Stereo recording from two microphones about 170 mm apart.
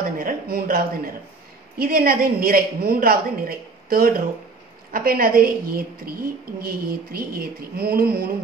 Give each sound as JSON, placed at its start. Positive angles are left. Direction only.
{"t": 0.2, "sound": "a woman's voice", "side_deg": -60}